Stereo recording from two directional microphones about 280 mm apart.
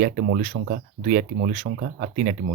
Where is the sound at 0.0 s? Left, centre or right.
Right.